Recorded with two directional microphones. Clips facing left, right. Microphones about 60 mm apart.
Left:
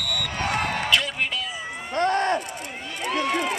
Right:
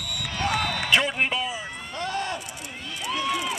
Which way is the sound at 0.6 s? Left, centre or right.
Left.